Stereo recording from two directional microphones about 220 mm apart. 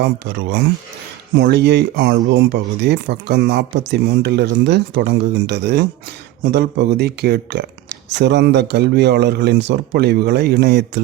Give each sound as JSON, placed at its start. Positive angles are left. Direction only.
{"t": 0.0, "sound": "speech", "side_deg": -50}